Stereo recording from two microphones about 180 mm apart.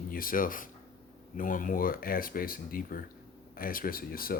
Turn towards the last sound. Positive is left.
turn(degrees=55)  # may be behind; listen again after turning